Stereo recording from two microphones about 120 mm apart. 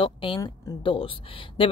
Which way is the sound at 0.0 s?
45° left (ahead or behind).